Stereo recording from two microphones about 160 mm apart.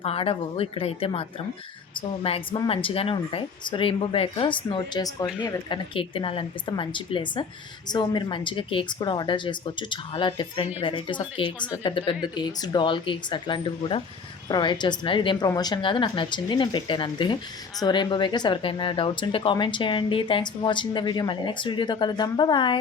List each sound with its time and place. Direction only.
0.0 s speech: 35° left (ahead or behind)
2.2 s speech: 35° left (ahead or behind)